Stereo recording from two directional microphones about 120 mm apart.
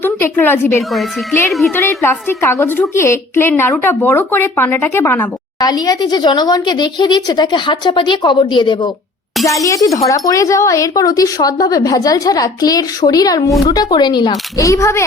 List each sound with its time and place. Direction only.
0.0 s a woman's voice: 15° left (ahead or behind)
1.5 s a child's voice: centre (ahead or behind)
1.7 s a woman's voice: 20° left (ahead or behind)
5.6 s speech: 30° left (ahead or behind)
9.6 s speech: 30° left (ahead or behind)
14.7 s a woman's voice: 25° left (ahead or behind)